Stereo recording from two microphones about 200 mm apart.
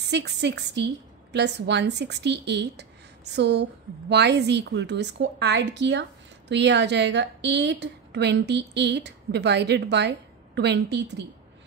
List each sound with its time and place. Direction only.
0.1 s a woman's voice: 60° right (ahead or behind)